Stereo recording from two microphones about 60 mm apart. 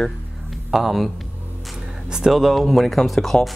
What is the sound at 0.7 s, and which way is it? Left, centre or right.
Speech, centre.